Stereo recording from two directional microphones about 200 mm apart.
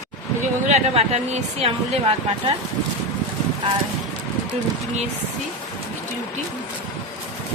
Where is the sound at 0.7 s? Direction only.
35° right (ahead or behind).